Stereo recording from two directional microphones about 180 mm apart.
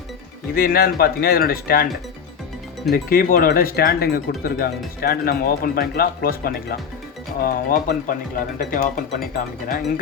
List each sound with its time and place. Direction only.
0.5 s speech: 55° left (ahead or behind)
2.9 s speech: 50° left (ahead or behind)